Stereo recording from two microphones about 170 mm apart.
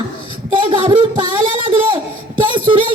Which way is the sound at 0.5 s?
30° right (ahead or behind).